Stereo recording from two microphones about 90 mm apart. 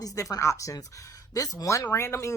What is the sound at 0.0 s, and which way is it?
Speech, 40° left (ahead or behind).